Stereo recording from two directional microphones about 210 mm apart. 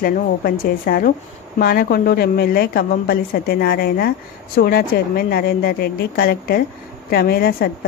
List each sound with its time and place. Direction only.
0.0 s a woman's voice: 45° left (ahead or behind)